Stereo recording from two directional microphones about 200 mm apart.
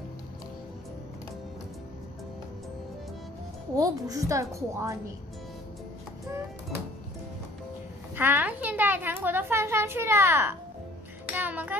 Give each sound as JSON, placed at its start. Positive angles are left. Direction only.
{"t": 3.7, "sound": "a woman's voice", "side_deg": -15}
{"t": 8.2, "sound": "a woman's voice", "side_deg": -10}
{"t": 11.3, "sound": "music", "side_deg": -10}